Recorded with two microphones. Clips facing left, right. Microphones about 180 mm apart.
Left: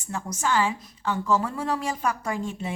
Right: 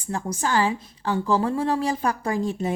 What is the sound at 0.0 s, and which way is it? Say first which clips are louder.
A woman's voice: right 2 dB; 35° right (ahead or behind).